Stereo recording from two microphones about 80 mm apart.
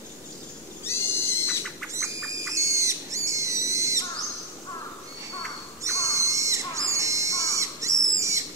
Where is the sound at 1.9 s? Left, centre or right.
Right.